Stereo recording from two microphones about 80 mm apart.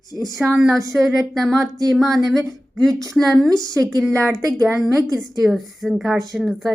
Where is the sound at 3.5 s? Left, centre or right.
Right.